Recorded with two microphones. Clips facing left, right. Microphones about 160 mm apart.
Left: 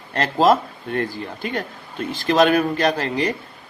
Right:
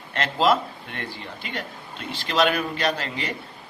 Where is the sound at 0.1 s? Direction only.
45° left (ahead or behind).